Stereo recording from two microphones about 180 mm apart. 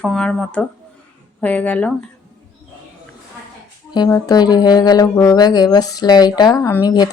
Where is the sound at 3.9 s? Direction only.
25° left (ahead or behind).